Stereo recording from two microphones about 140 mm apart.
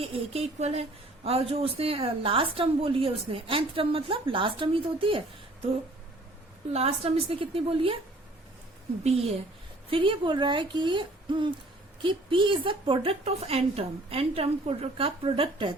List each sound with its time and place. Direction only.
0.0 s a woman's voice: 45° right (ahead or behind)
6.7 s a woman's voice: 45° right (ahead or behind)
9.0 s a woman's voice: 45° right (ahead or behind)